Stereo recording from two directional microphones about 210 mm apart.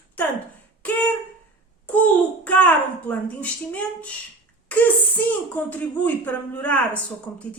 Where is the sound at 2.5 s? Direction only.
5° left (ahead or behind).